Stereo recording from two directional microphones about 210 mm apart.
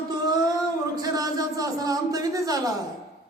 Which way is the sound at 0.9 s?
15° right (ahead or behind).